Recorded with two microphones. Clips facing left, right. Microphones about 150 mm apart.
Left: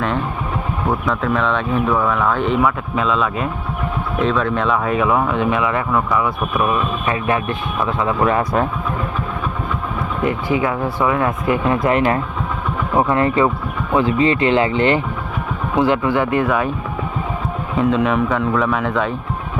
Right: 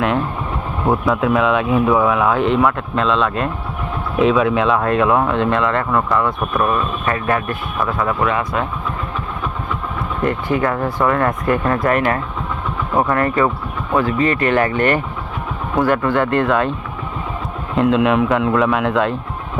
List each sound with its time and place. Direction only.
1.0 s speech: 5° right (ahead or behind); by 8.1 s 15° left (ahead or behind)
8.2 s speech: 40° left (ahead or behind)
10.2 s speech: 10° left (ahead or behind)
13.1 s speech: 20° left (ahead or behind)
17.7 s speech: centre (ahead or behind)